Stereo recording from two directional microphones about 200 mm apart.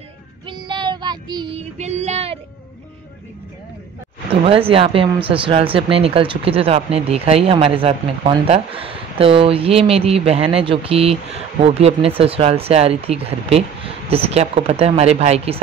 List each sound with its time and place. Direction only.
0.5 s child singing: 25° right (ahead or behind)
4.5 s speech: 25° right (ahead or behind)